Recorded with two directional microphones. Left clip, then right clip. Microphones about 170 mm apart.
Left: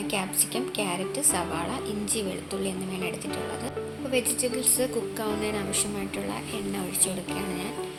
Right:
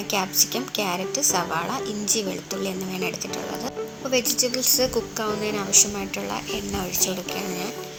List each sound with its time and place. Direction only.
0.1 s a woman's voice: 20° right (ahead or behind)
4.1 s a woman's voice: 20° right (ahead or behind)